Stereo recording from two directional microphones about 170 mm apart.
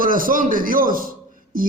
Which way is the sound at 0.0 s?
55° right (ahead or behind).